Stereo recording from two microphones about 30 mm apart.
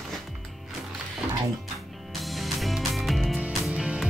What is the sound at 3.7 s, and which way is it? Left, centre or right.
Music, right.